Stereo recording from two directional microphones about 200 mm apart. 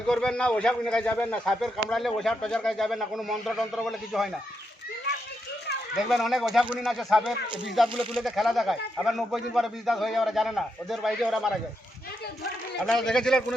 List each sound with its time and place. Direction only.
0.1 s a man's voice: 5° left (ahead or behind)
5.1 s children playing: 55° left (ahead or behind)
6.1 s a man's voice: centre (ahead or behind)
12.8 s a man's voice: centre (ahead or behind)